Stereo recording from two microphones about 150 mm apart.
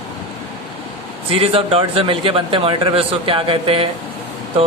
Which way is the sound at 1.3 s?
40° right (ahead or behind).